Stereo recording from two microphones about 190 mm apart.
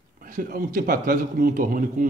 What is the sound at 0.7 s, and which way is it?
Speech, 45° right (ahead or behind).